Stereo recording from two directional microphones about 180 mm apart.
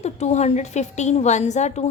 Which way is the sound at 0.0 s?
40° left (ahead or behind).